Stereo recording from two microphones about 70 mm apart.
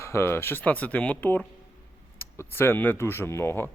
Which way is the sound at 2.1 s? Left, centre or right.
Left.